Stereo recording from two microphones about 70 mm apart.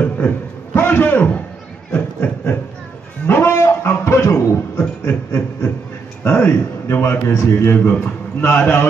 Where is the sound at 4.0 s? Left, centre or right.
Left.